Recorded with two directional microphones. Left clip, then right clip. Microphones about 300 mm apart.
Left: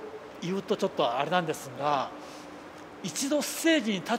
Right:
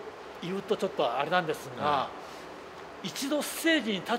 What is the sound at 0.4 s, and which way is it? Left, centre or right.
Speech, left.